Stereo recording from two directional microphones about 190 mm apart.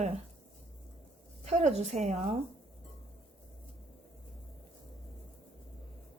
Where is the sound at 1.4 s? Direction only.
35° right (ahead or behind).